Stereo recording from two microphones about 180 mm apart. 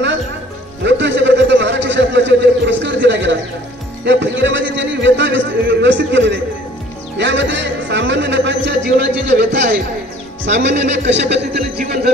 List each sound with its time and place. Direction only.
0.8 s a sound: 80° right
7.2 s music: 85° right; by 9.5 s 70° right (ahead or behind)
10.4 s speech: 90° right
11.1 s a man's voice: 75° right (ahead or behind)